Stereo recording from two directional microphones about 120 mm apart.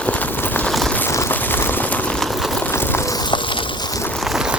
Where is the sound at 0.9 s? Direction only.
20° left (ahead or behind); by 2.6 s centre (ahead or behind).